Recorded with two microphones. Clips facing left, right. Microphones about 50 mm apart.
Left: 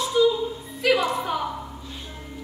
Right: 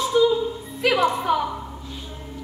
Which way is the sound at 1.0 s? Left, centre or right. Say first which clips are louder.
Right 5 dB; right.